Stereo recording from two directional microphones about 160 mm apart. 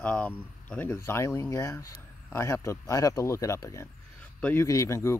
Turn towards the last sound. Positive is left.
turn(degrees=20)  # may be behind; listen again after turning